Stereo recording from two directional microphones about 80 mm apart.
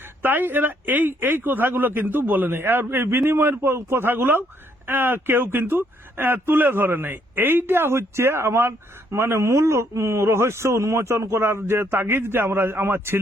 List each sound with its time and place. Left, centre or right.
0.2 s a man's voice: right